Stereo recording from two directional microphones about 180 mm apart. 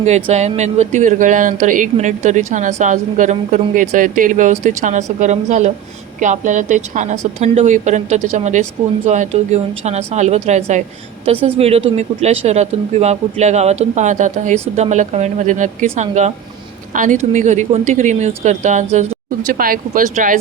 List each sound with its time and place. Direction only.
0.0 s speech: 40° right (ahead or behind)
19.5 s speech: 55° right (ahead or behind)